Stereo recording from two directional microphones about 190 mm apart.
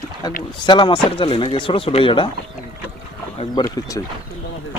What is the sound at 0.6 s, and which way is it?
Speech, 25° left (ahead or behind).